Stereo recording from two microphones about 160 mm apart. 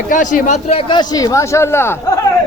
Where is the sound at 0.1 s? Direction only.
55° left (ahead or behind); by 2.0 s 15° left (ahead or behind).